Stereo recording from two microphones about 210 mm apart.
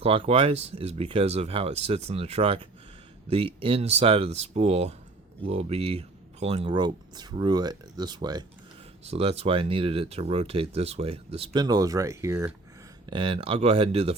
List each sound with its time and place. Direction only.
0.0 s speech: 25° right (ahead or behind)